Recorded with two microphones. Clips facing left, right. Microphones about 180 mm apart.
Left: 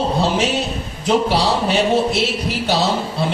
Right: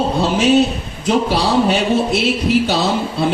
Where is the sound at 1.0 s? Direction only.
60° right (ahead or behind).